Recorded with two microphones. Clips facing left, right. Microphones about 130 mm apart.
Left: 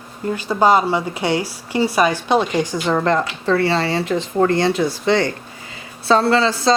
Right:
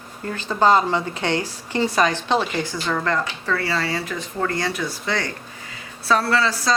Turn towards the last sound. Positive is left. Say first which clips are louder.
# left 5 dB
turn(degrees=25)  # may be behind; listen again after turning